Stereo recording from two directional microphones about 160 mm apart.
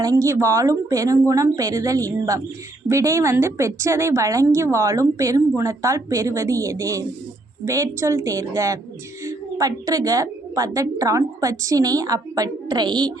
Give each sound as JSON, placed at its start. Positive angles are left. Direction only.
{"t": 0.0, "sound": "a woman's voice", "side_deg": -20}